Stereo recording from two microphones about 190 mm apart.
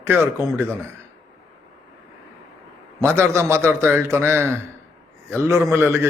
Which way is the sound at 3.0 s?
15° right (ahead or behind).